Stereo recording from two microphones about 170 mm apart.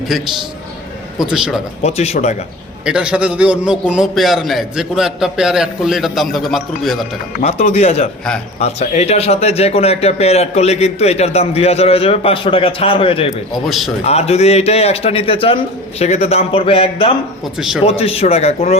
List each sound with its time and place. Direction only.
0.1 s a man's voice: centre (ahead or behind)
1.8 s a man's voice: 40° left (ahead or behind)
2.8 s a man's voice: 5° right (ahead or behind)
7.4 s a man's voice: 40° left (ahead or behind)
13.7 s a man's voice: centre (ahead or behind)
14.0 s a man's voice: 40° left (ahead or behind)
17.6 s a man's voice: 5° right (ahead or behind)
17.8 s a man's voice: 35° left (ahead or behind)